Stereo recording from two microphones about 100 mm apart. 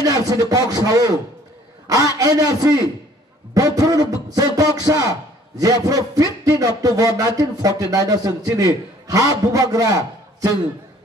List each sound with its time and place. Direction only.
0.0 s speech: 40° right (ahead or behind)